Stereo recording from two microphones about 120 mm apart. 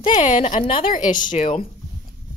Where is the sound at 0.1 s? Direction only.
80° left.